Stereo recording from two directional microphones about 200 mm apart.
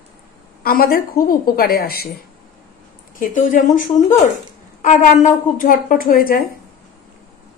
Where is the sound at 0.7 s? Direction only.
50° left (ahead or behind).